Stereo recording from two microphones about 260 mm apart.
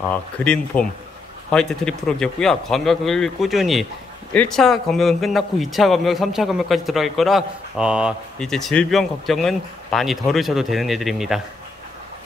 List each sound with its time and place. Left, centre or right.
0.1 s speech: centre